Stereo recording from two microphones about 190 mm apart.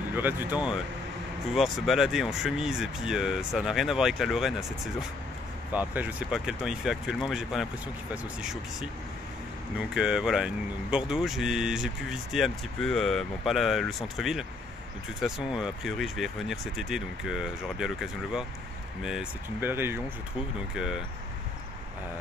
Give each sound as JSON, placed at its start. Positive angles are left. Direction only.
{"t": 0.1, "sound": "speech", "side_deg": -10}
{"t": 5.7, "sound": "speech", "side_deg": -10}
{"t": 9.8, "sound": "speech", "side_deg": -5}